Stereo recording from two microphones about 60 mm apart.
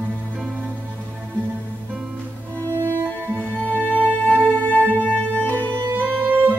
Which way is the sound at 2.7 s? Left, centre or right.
Right.